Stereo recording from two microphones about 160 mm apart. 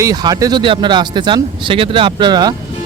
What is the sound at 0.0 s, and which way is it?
Speech, 25° right (ahead or behind).